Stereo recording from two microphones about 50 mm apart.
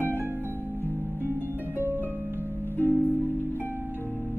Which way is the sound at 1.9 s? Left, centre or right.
Right.